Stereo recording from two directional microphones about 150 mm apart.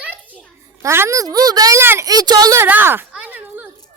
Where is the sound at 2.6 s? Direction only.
15° right (ahead or behind).